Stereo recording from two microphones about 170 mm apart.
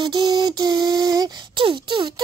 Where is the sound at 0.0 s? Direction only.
25° right (ahead or behind).